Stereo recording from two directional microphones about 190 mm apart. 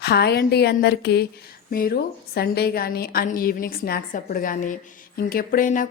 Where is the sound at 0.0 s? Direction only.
60° left (ahead or behind).